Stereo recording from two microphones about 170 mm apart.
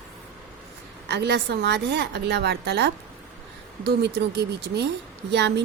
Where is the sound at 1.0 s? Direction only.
85° right.